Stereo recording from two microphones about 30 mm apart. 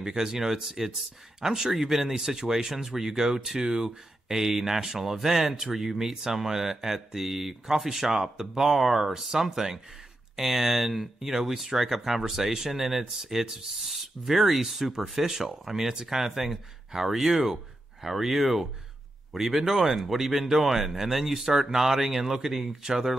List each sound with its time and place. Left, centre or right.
0.0 s speech: centre
14.8 s speech: centre